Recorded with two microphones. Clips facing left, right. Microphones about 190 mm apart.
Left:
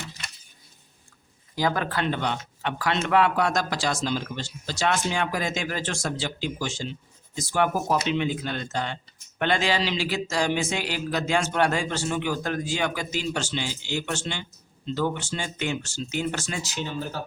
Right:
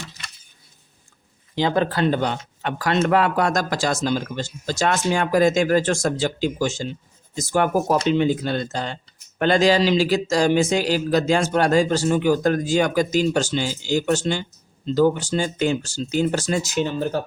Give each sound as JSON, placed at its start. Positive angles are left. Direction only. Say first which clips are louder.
{"t": 1.5, "sound": "speech", "louder": "right 5 dB", "side_deg": -25}